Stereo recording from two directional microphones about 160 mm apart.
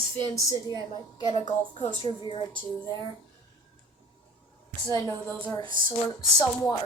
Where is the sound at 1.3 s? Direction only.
35° left (ahead or behind).